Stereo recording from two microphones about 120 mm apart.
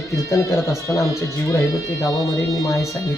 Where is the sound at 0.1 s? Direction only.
25° left (ahead or behind).